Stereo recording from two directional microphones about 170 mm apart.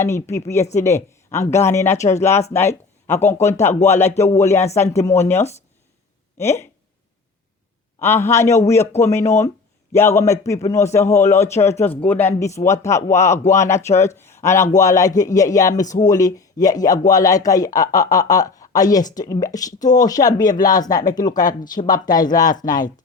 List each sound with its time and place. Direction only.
0.0 s a man's voice: 15° left (ahead or behind)
6.3 s a man's voice: 15° left (ahead or behind)
8.0 s a man's voice: 15° left (ahead or behind)
21.4 s speech: 50° left (ahead or behind)
21.8 s speech: 25° left (ahead or behind)